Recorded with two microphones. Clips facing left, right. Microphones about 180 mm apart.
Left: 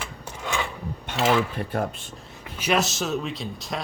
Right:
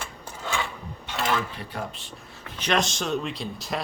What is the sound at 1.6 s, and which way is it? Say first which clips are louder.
Speech: left 7 dB; 50° left (ahead or behind).